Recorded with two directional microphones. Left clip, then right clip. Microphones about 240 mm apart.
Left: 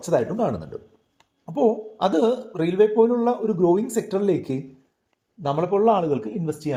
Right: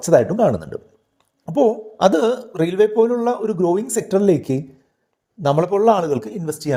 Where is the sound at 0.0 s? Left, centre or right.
Right.